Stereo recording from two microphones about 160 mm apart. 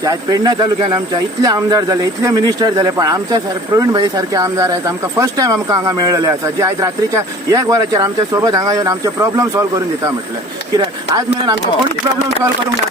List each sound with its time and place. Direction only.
0.0 s speech: 25° right (ahead or behind)